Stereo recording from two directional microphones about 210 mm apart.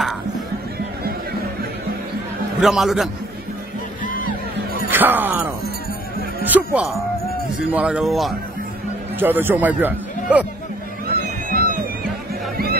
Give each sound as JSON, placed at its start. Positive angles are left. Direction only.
{"t": 2.6, "sound": "speech", "side_deg": 0}
{"t": 4.0, "sound": "music", "side_deg": 40}
{"t": 4.9, "sound": "speech", "side_deg": -10}
{"t": 6.4, "sound": "music", "side_deg": -10}
{"t": 7.7, "sound": "speech", "side_deg": -5}
{"t": 11.5, "sound": "music", "side_deg": -45}